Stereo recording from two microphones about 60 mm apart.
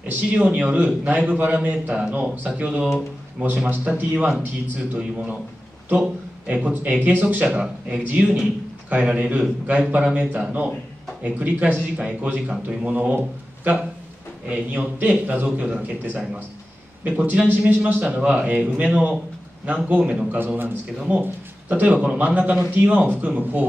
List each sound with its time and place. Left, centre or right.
0.1 s a man's voice: right
7.4 s speech: centre
7.9 s a man's voice: right
14.5 s a man's voice: right
20.2 s a man's voice: right